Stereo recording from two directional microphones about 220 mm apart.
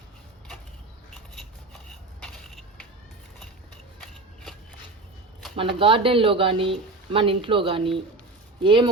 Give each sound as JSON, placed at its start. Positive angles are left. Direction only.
{"t": 2.2, "sound": "crushing", "side_deg": 5}
{"t": 5.5, "sound": "speech", "side_deg": -25}